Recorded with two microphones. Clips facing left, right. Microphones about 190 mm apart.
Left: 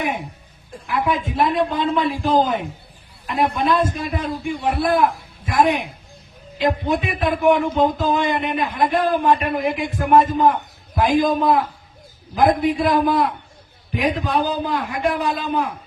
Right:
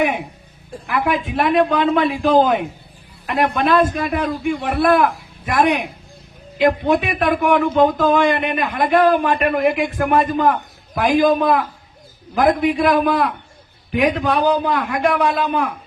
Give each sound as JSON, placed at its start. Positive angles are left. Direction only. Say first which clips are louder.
{"t": 0.9, "sound": "a man's voice", "louder": "right 1 dB", "side_deg": -75}
{"t": 6.6, "sound": "a man's voice", "louder": "right 4 dB", "side_deg": -65}
{"t": 10.9, "sound": "a man's voice", "louder": "right 2 dB", "side_deg": -65}
{"t": 13.9, "sound": "a man's voice", "louder": "right 4 dB", "side_deg": -90}
{"t": 14.3, "sound": "a man's voice", "louder": "right 4 dB", "side_deg": -65}